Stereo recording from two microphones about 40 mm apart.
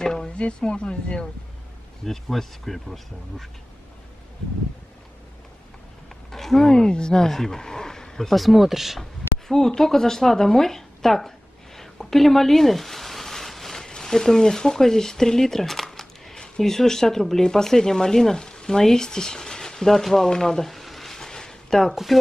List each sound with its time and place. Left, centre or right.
0.0 s a sound: centre
0.4 s speech: left
2.0 s speech: centre
6.3 s a sound: centre
6.7 s speech: left
8.4 s speech: centre
9.7 s speech: centre
21.9 s speech: centre